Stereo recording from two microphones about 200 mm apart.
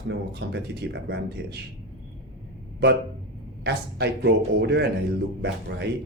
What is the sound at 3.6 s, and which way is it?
Speech, 55° right (ahead or behind).